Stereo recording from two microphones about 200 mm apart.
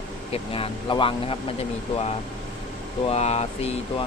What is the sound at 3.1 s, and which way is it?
Speech, 35° left (ahead or behind).